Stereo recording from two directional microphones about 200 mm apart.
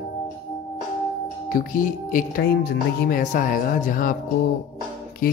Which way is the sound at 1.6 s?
40° left (ahead or behind).